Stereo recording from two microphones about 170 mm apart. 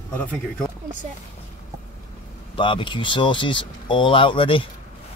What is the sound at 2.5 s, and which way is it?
Speech, 30° left (ahead or behind).